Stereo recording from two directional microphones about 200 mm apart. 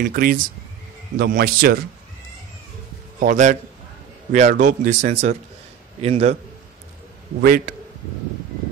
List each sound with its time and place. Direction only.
0.1 s a man's voice: 45° right (ahead or behind)
3.2 s speech: 40° right (ahead or behind)
7.4 s a man's voice: 45° right (ahead or behind)